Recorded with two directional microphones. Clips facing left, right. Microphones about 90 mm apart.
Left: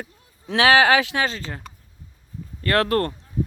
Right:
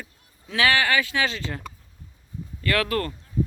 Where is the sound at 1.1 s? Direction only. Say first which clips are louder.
Left 1 dB; 40° left (ahead or behind).